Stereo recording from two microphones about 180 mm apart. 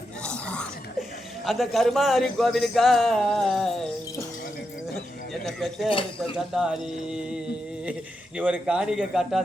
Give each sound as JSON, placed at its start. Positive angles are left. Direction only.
{"t": 0.2, "sound": "a sound", "side_deg": 5}
{"t": 1.5, "sound": "speech", "side_deg": 0}
{"t": 5.5, "sound": "speech", "side_deg": 0}
{"t": 5.9, "sound": "speech", "side_deg": 30}
{"t": 6.3, "sound": "speech", "side_deg": -5}
{"t": 8.4, "sound": "speech", "side_deg": -5}